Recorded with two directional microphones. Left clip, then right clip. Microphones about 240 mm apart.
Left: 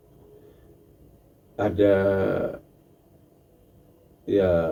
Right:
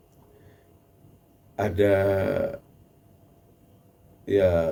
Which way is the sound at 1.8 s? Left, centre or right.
Right.